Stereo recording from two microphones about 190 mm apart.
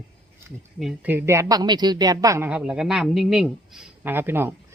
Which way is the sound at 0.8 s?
10° right (ahead or behind).